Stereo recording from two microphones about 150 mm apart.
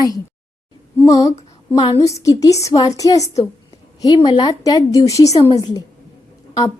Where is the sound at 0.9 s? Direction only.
20° left (ahead or behind).